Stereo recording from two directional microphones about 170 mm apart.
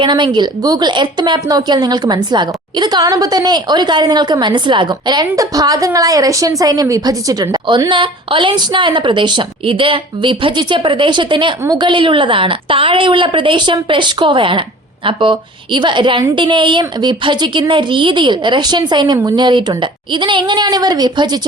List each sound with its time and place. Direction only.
0.0 s a woman's voice: 25° right (ahead or behind)